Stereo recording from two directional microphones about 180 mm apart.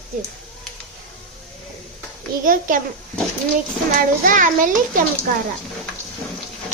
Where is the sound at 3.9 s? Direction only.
50° right (ahead or behind).